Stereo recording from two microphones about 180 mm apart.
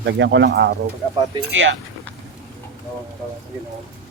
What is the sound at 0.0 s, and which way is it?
Speech, 90° right.